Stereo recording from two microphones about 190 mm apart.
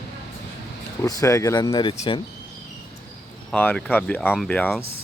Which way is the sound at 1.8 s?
30° left (ahead or behind).